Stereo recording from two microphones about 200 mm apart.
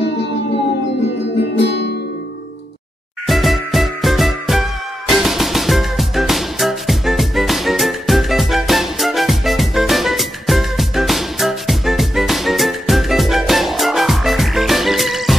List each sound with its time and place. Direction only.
1.5 s music: 60° left (ahead or behind)
3.3 s music: centre (ahead or behind)